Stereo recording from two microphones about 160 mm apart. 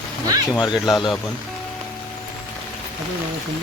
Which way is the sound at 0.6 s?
25° left (ahead or behind).